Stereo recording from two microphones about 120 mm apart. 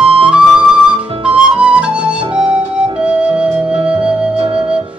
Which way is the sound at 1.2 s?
10° right (ahead or behind).